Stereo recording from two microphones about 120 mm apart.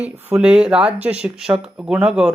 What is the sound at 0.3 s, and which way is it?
Speech, 10° right (ahead or behind).